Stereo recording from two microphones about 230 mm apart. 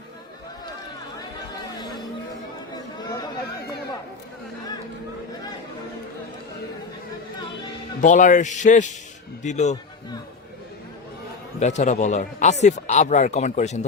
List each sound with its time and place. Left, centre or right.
1.8 s chatter: centre
8.0 s a man's voice: left
11.6 s a man's voice: left